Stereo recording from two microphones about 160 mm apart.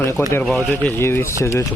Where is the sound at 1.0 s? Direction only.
15° left (ahead or behind).